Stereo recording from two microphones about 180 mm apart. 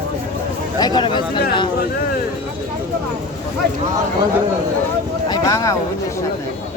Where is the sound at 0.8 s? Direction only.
25° left (ahead or behind).